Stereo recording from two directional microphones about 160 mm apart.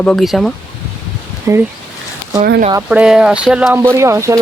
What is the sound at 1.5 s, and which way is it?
Speech, 20° right (ahead or behind).